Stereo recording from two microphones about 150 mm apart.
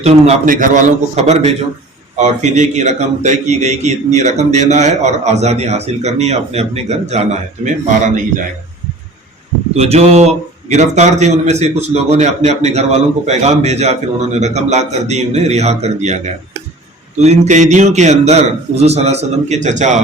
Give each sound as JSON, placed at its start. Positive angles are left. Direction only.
{"t": 0.0, "sound": "a man's voice", "side_deg": -45}
{"t": 0.4, "sound": "a man's voice", "side_deg": -65}
{"t": 9.7, "sound": "a man's voice", "side_deg": -45}